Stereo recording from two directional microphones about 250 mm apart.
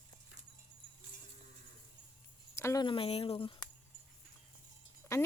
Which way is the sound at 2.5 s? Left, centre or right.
Centre.